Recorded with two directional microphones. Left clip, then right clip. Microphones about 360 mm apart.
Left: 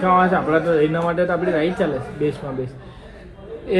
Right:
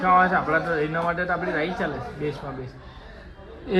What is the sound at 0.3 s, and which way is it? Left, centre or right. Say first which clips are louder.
Speech: left 5 dB; left.